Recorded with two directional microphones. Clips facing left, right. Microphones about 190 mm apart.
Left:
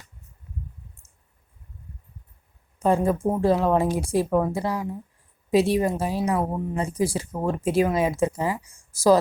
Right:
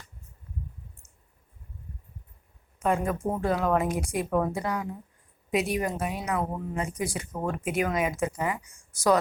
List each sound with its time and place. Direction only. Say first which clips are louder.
2.7 s speech: left 5 dB; 30° left (ahead or behind)